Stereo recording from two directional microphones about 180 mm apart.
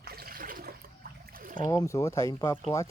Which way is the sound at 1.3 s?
50° right (ahead or behind).